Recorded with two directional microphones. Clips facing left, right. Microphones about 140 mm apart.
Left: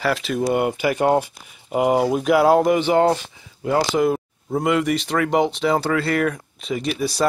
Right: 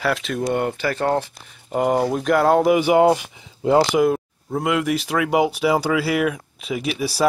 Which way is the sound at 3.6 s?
25° right (ahead or behind).